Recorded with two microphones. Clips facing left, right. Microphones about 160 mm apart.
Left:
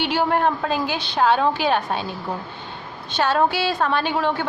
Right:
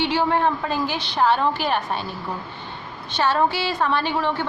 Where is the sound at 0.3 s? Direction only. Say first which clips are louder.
Left 1 dB; 50° left (ahead or behind).